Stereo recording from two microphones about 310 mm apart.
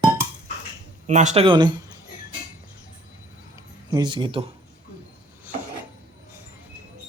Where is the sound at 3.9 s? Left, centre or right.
Centre.